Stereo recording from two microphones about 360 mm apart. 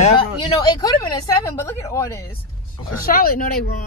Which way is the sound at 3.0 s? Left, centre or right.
Left.